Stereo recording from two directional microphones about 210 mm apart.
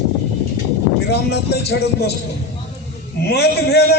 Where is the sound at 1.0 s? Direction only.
50° left (ahead or behind).